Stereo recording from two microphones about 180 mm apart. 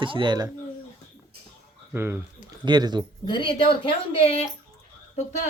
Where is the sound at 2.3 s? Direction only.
25° right (ahead or behind).